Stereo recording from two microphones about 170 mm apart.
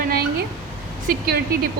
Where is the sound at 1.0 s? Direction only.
65° right (ahead or behind).